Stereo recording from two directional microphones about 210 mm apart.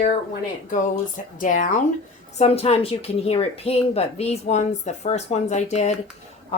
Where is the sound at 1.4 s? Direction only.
40° left (ahead or behind).